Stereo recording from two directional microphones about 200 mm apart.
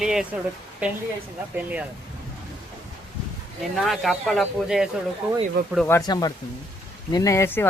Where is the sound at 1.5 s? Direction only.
10° right (ahead or behind).